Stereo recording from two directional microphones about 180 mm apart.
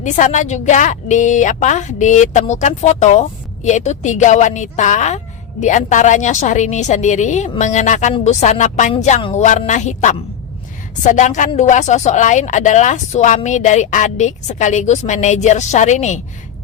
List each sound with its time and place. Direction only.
0.0 s a woman's voice: 45° left (ahead or behind)